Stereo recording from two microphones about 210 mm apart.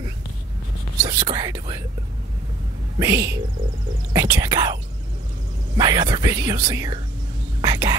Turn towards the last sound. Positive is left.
turn(degrees=-20)  # may be behind; listen again after turning